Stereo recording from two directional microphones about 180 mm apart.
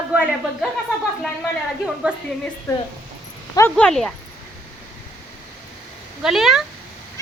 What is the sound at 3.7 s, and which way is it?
Speech, 5° left (ahead or behind).